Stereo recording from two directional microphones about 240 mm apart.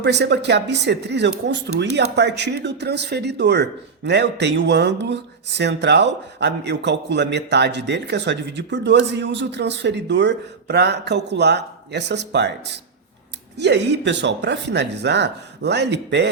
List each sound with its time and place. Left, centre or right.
0.0 s speech: right